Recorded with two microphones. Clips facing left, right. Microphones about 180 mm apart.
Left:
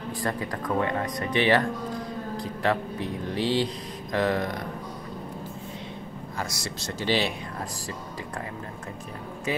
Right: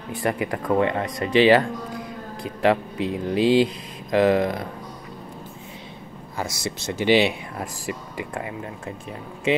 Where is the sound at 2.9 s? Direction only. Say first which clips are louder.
Right 6 dB; 80° right.